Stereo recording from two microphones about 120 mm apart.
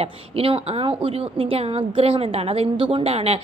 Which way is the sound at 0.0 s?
55° right (ahead or behind).